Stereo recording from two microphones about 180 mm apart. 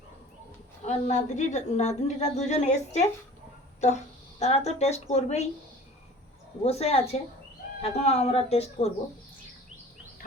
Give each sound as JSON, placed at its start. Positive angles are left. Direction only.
{"t": 0.9, "sound": "a woman's voice", "side_deg": 40}
{"t": 6.6, "sound": "a woman's voice", "side_deg": 35}